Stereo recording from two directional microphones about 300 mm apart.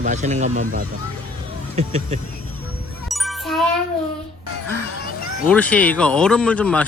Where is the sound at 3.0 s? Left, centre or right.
Centre.